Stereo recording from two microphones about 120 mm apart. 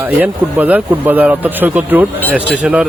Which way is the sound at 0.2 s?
15° right (ahead or behind).